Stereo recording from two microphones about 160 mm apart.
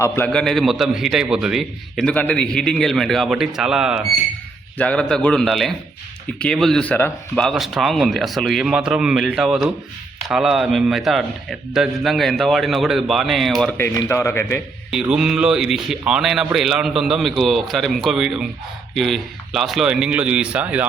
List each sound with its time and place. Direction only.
0.3 s a man's voice: centre (ahead or behind)
4.8 s a man's voice: 5° left (ahead or behind)
13.7 s speech: 15° left (ahead or behind)
14.8 s a man's voice: 5° right (ahead or behind)